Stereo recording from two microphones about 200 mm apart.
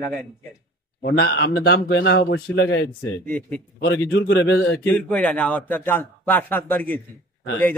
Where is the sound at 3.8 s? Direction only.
60° left (ahead or behind).